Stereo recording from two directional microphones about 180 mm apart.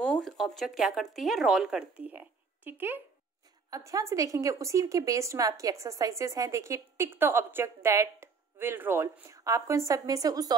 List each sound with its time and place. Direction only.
0.0 s a woman's voice: centre (ahead or behind); by 10.5 s 20° right (ahead or behind)